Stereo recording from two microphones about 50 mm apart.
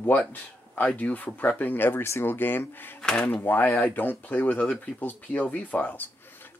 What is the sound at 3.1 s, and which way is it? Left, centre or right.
Speech, left.